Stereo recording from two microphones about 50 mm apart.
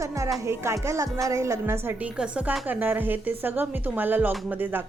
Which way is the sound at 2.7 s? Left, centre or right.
Right.